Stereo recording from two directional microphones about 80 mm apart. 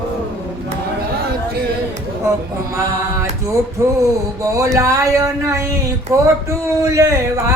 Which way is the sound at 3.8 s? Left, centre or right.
Right.